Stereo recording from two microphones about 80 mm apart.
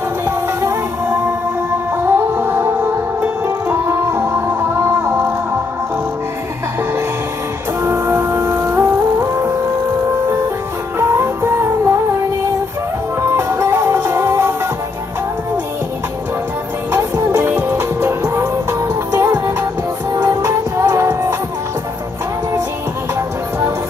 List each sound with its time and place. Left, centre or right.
2.0 s music: right
7.8 s music: right
11.0 s music: right
13.2 s music: right
16.9 s music: right